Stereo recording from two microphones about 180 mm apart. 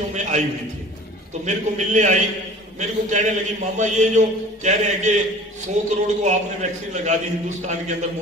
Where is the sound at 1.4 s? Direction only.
40° right (ahead or behind).